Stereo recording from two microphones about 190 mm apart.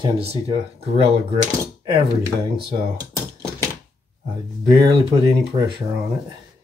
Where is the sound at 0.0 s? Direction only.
30° right (ahead or behind).